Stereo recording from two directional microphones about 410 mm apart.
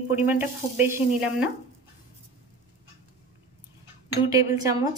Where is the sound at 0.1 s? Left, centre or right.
Centre.